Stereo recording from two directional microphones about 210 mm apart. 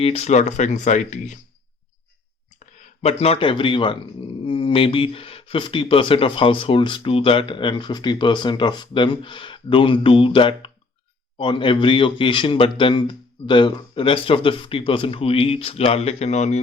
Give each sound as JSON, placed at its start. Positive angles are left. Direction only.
{"t": 0.0, "sound": "speech", "side_deg": 30}
{"t": 3.0, "sound": "speech", "side_deg": 30}